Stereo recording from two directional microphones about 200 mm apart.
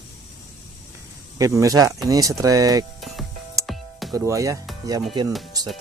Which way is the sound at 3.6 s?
Centre (ahead or behind).